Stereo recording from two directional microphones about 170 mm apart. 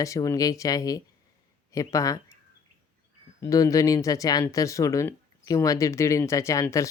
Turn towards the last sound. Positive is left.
turn(degrees=15)  # may be behind; listen again after turning